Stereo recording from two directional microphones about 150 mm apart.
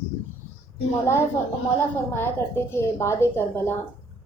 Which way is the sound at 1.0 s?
15° left (ahead or behind).